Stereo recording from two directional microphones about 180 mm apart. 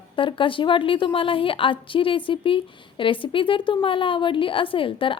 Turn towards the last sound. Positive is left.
turn(degrees=30)  # may be behind; listen again after turning